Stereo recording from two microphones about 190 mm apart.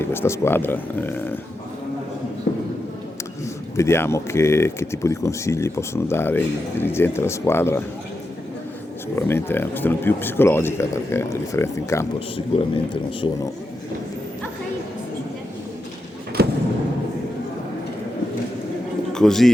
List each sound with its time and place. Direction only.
0.0 s speech: 10° left (ahead or behind)
2.5 s a sound: 60° left (ahead or behind)
3.4 s speech: 15° left (ahead or behind)
9.1 s speech: 10° left (ahead or behind)
12.5 s speech: 25° left (ahead or behind)
16.4 s a sound: 55° right (ahead or behind)
19.1 s speech: centre (ahead or behind)